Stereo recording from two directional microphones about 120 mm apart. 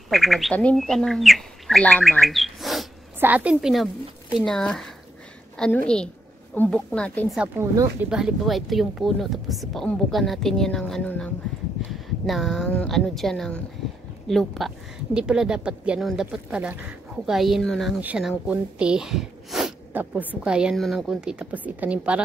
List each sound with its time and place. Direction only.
0.1 s a woman's voice: centre (ahead or behind)
2.0 s bird: centre (ahead or behind)
3.2 s a woman's voice: 15° right (ahead or behind); by 7.2 s 10° left (ahead or behind)
7.5 s speech: 30° right (ahead or behind)
8.0 s a woman's voice: 5° right (ahead or behind); by 11.3 s 10° left (ahead or behind)
11.9 s a woman's voice: centre (ahead or behind)
19.9 s a woman's voice: 15° right (ahead or behind)